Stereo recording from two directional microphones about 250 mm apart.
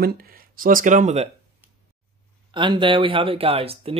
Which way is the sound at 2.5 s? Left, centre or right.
Centre.